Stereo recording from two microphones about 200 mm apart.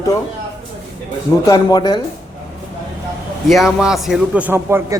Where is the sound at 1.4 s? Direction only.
20° left (ahead or behind).